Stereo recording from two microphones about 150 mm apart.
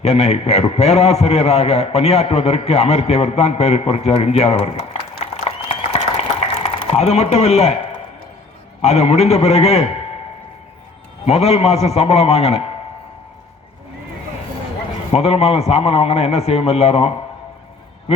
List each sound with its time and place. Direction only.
0.0 s a man's voice: 45° left (ahead or behind)
8.8 s a man's voice: 45° left (ahead or behind)
11.3 s a man's voice: 45° left (ahead or behind)
15.1 s a man's voice: 45° left (ahead or behind)